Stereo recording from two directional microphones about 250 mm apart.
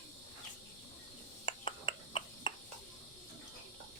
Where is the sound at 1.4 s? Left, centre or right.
Left.